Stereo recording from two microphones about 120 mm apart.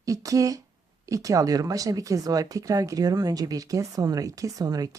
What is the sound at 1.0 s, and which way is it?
Speech, 30° right (ahead or behind).